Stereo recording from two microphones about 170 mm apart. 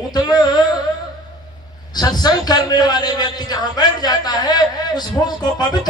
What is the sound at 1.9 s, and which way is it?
A man's voice, 25° left (ahead or behind).